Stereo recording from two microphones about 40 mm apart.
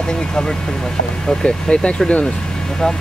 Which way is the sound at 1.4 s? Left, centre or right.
Left.